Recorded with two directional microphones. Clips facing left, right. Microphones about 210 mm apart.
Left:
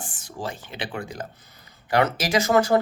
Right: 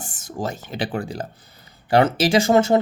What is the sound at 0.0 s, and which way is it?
Speech, 45° right (ahead or behind).